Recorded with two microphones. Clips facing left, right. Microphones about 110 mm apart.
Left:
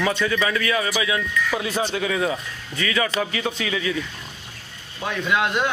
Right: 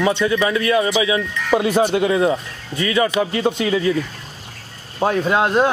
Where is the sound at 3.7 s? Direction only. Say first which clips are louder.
Right 7 dB; 35° right (ahead or behind).